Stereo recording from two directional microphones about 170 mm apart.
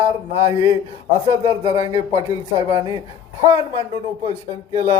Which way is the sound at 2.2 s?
20° right (ahead or behind).